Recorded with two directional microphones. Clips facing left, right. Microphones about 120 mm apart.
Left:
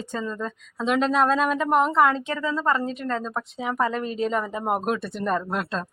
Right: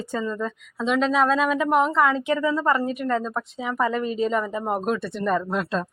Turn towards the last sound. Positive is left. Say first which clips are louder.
# right 2 dB
turn(degrees=0)  # may be behind; listen again after turning